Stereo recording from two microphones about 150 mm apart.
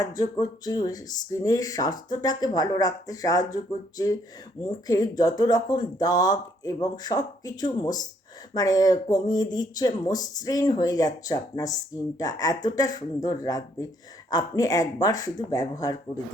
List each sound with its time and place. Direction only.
0.0 s speech: 25° left (ahead or behind)